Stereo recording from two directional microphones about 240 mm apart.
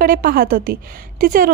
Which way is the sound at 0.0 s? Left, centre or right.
Right.